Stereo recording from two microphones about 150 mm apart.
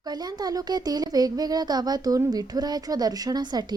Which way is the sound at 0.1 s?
25° right (ahead or behind).